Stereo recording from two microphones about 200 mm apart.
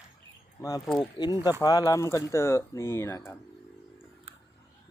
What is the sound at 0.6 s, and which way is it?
Speech, 15° left (ahead or behind).